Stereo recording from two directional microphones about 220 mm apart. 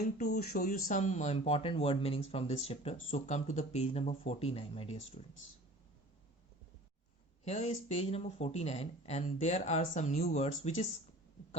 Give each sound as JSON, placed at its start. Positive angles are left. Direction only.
{"t": 0.3, "sound": "speech", "side_deg": 40}
{"t": 7.4, "sound": "speech", "side_deg": 30}